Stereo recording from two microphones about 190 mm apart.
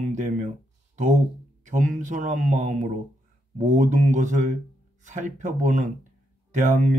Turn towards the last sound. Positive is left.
turn(degrees=-40)  # may be behind; listen again after turning